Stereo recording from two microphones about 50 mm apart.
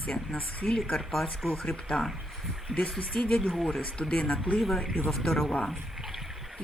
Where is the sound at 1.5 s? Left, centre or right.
Left.